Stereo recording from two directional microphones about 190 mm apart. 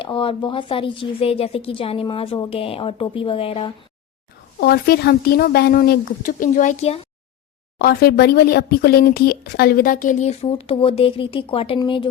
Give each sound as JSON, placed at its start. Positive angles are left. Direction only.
{"t": 0.0, "sound": "a woman's voice", "side_deg": 25}
{"t": 4.6, "sound": "speech", "side_deg": 55}
{"t": 7.8, "sound": "speech", "side_deg": 55}